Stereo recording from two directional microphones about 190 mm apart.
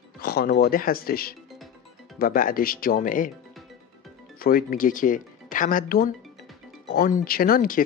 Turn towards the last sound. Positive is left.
turn(degrees=45)  # may be behind; listen again after turning